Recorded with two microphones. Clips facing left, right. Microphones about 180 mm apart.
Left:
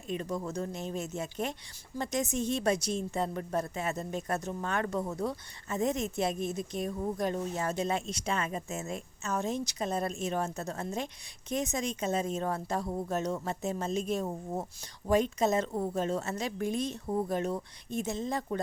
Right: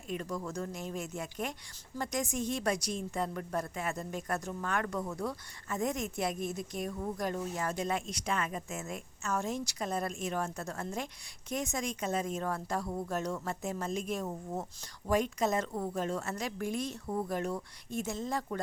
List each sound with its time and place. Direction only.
0.1 s a woman's voice: 25° left (ahead or behind)